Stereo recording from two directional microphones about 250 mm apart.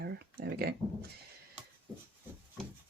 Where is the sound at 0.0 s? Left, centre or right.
Right.